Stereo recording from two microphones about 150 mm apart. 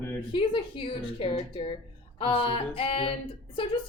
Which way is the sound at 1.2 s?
35° left (ahead or behind).